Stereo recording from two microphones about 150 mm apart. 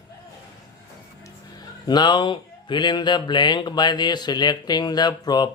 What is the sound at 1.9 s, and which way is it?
Speech, 30° left (ahead or behind).